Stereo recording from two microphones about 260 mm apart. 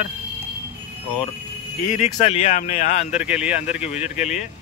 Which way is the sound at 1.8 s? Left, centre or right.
Left.